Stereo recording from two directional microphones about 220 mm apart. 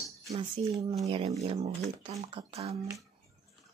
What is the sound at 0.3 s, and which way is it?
Speech, 25° right (ahead or behind).